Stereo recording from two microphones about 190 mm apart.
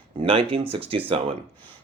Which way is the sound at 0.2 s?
30° right (ahead or behind).